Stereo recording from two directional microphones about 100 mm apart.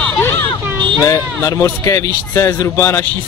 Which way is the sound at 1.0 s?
30° left (ahead or behind).